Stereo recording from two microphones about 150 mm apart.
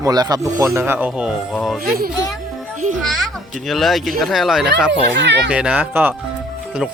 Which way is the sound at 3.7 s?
Centre (ahead or behind).